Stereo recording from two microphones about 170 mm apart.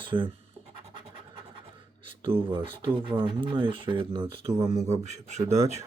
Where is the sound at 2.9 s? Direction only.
30° right (ahead or behind).